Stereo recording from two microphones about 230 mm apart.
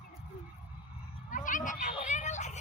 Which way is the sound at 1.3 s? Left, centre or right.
Left.